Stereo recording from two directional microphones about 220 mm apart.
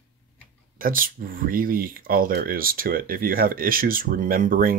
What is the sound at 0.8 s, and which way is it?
Speech, 40° right (ahead or behind).